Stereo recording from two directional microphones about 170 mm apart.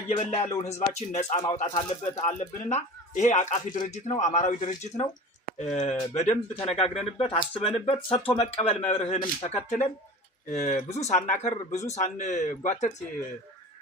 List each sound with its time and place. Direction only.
0.2 s speech: 40° left (ahead or behind)